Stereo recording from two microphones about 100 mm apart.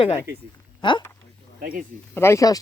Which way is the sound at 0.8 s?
50° left (ahead or behind).